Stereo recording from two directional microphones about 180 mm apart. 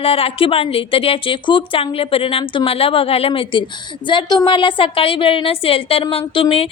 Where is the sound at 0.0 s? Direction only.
30° left (ahead or behind).